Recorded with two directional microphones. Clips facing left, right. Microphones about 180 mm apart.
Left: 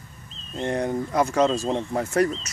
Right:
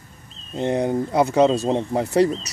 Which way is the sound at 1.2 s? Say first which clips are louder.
Right 4 dB; 20° right (ahead or behind).